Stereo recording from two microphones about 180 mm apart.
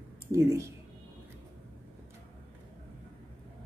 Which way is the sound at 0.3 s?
15° right (ahead or behind).